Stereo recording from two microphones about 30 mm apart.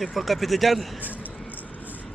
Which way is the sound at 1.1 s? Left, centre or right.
Left.